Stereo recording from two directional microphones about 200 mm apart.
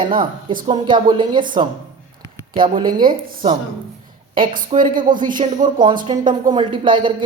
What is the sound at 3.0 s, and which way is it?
Speech, 45° right (ahead or behind).